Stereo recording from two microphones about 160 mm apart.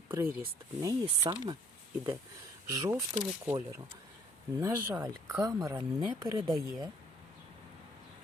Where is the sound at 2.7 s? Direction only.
20° right (ahead or behind).